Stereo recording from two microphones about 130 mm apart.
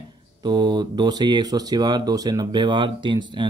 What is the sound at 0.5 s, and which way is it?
Speech, 35° right (ahead or behind).